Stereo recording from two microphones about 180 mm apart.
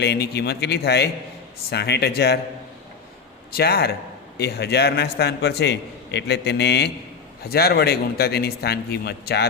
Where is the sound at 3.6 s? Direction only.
60° left (ahead or behind).